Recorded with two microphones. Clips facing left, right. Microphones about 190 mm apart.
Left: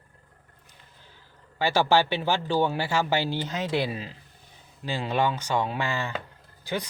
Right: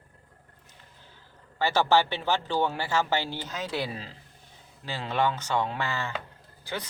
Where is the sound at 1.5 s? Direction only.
10° left (ahead or behind).